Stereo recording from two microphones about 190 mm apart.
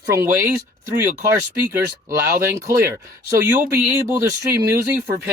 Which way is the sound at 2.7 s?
15° right (ahead or behind).